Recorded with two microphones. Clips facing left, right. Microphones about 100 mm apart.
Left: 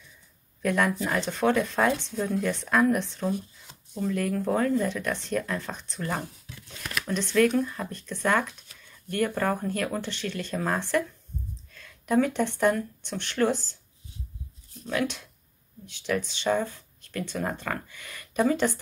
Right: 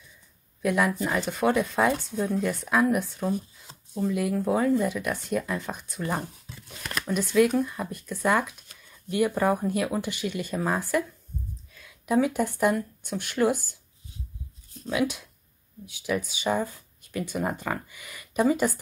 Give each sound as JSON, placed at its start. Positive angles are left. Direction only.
{"t": 0.6, "sound": "speech", "side_deg": -5}
{"t": 3.7, "sound": "a sound", "side_deg": -30}
{"t": 4.0, "sound": "speech", "side_deg": -10}
{"t": 14.9, "sound": "speech", "side_deg": -10}